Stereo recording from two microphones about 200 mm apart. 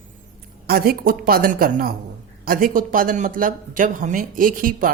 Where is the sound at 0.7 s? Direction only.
50° right (ahead or behind).